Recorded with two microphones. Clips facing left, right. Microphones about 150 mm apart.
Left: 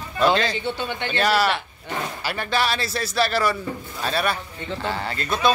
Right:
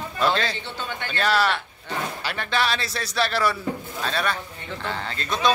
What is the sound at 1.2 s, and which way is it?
A man's voice, 5° left (ahead or behind).